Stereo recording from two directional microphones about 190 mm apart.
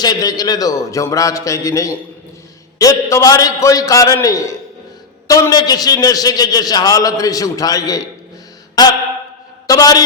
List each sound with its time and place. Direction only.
0.0 s a man's voice: 20° left (ahead or behind)